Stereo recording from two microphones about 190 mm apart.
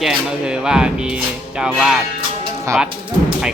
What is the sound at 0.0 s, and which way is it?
Speech, 5° right (ahead or behind).